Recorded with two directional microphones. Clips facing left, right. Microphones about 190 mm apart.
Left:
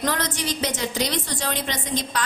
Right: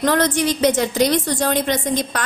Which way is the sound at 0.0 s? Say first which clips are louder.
Right 9 dB; 60° right (ahead or behind).